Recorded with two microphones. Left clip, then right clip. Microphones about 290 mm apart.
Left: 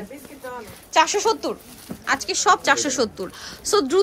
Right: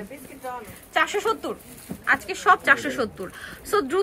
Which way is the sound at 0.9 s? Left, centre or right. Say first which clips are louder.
Left 4 dB; centre.